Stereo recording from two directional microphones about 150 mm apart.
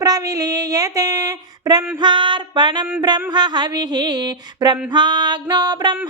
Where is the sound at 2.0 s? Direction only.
30° right (ahead or behind).